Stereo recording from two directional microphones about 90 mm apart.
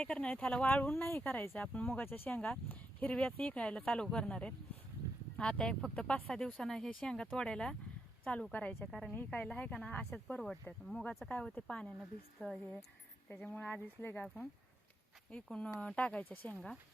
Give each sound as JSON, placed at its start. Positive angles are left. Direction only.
{"t": 0.0, "sound": "speech", "side_deg": 10}
{"t": 8.9, "sound": "speech", "side_deg": 0}
{"t": 9.1, "sound": "speech", "side_deg": 20}
{"t": 13.5, "sound": "speech", "side_deg": 15}